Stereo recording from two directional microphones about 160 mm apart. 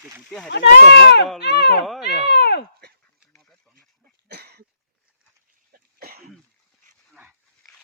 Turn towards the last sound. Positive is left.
turn(degrees=-75)  # may be behind; listen again after turning